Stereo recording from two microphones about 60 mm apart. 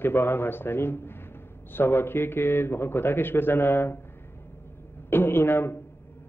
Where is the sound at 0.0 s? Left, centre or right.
Left.